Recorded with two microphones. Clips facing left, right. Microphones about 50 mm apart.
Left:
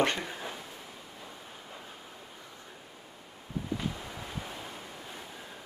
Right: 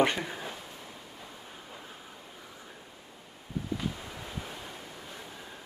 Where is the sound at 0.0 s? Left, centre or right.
Centre.